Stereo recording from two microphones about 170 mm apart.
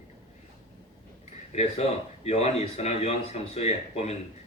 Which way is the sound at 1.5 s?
40° left (ahead or behind).